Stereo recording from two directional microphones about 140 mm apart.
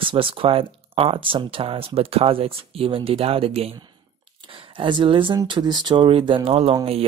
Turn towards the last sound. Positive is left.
turn(degrees=-45)  # may be behind; listen again after turning